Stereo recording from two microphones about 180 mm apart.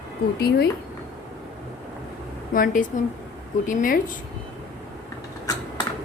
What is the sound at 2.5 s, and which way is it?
A woman's voice, 50° left (ahead or behind).